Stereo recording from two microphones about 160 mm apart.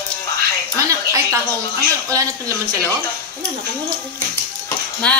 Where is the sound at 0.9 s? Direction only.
20° right (ahead or behind).